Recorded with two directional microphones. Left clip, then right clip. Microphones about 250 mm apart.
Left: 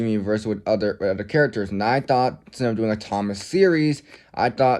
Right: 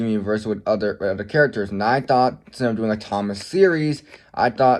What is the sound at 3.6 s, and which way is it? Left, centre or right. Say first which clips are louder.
Speech: right 1 dB; left.